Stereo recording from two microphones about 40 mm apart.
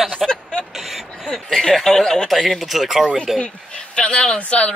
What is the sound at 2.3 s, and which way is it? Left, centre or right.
A man's voice, centre.